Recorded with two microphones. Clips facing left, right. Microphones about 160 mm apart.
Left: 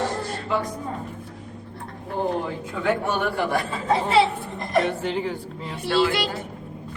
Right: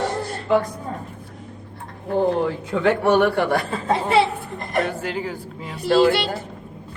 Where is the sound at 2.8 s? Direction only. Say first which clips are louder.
Right 7 dB; 70° right (ahead or behind).